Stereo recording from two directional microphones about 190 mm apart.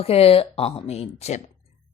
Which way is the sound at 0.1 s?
30° left (ahead or behind).